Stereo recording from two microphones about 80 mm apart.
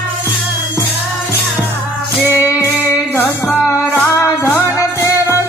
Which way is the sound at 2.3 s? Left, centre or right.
Left.